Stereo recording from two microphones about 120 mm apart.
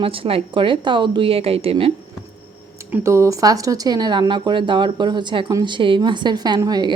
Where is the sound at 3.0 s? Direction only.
25° right (ahead or behind).